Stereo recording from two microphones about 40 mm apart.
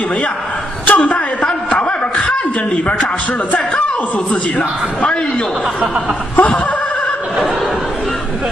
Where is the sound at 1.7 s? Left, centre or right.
Left.